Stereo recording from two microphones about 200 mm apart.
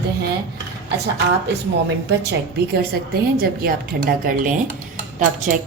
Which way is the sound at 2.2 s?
50° right (ahead or behind).